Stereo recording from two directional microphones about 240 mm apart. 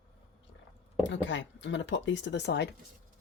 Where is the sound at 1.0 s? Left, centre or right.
Left.